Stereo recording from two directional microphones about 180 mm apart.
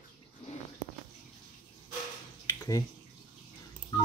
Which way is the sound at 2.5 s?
20° left (ahead or behind).